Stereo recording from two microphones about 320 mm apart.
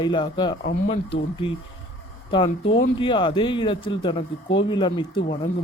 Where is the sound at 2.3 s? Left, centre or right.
Centre.